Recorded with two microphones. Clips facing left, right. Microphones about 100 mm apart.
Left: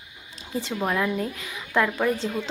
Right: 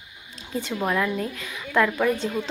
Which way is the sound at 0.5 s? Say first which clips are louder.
Right 1 dB; 25° left (ahead or behind).